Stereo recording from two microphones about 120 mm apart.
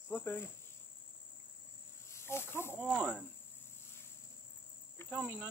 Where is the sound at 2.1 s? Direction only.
20° left (ahead or behind).